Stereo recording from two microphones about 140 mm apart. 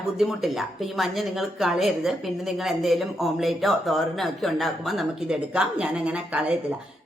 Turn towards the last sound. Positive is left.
turn(degrees=-5)  # may be behind; listen again after turning